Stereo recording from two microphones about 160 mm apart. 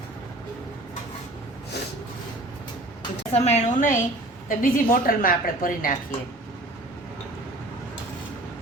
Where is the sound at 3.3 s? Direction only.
40° left (ahead or behind).